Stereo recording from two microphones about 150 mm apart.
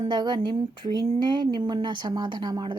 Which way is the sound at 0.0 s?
30° right (ahead or behind).